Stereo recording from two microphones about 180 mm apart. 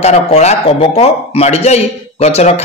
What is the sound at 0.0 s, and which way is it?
A woman's voice, 40° left (ahead or behind).